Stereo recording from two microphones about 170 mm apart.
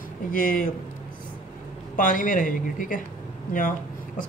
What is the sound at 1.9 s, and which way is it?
Speech, 50° left (ahead or behind).